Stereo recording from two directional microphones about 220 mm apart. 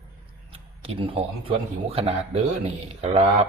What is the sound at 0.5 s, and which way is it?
Speech, 25° right (ahead or behind).